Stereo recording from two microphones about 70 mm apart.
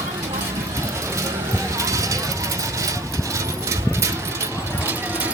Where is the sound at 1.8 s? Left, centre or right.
Right.